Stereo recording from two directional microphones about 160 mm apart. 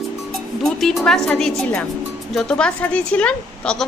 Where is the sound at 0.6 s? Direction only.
Centre (ahead or behind).